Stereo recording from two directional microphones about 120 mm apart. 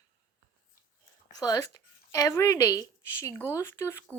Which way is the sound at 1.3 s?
30° left (ahead or behind).